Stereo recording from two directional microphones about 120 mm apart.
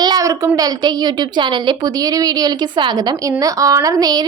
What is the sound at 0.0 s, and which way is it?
A woman's voice, 30° right (ahead or behind).